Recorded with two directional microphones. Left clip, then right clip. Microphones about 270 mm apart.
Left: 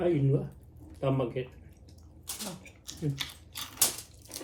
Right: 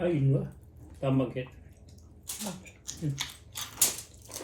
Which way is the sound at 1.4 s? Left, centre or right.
Centre.